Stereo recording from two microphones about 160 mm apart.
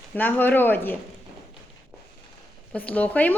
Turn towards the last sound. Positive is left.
turn(degrees=10)  # may be behind; listen again after turning